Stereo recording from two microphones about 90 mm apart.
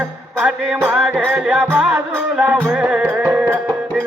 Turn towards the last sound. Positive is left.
turn(degrees=-15)  # may be behind; listen again after turning